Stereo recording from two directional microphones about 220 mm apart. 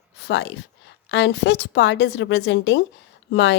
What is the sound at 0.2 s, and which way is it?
A woman's voice, 55° left (ahead or behind).